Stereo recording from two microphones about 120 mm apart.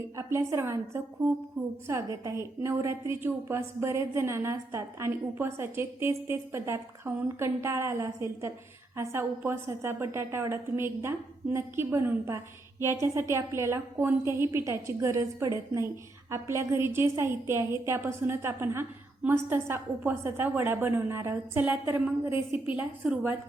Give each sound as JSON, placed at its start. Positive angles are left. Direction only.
{"t": 0.2, "sound": "a woman's voice", "side_deg": -20}
{"t": 1.9, "sound": "a woman's voice", "side_deg": -25}